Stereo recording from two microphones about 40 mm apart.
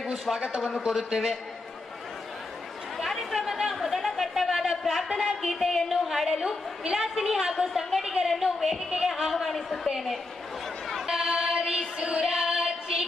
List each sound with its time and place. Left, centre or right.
0.6 s speech: centre
3.0 s chatter: centre
3.7 s a sound: centre
4.8 s a woman's voice: centre
7.5 s speech: centre
9.3 s speech: centre
11.1 s a sound: centre
12.2 s female singing: centre